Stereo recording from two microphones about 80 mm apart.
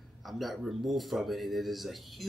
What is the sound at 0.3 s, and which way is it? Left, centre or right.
Speech, centre.